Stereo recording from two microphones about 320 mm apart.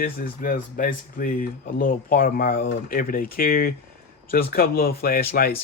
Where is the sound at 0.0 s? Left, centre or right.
Left.